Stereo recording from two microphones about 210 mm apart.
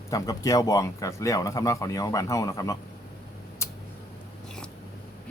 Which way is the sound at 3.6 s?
10° left (ahead or behind).